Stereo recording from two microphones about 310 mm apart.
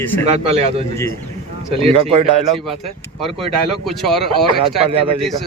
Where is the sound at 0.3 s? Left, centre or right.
Right.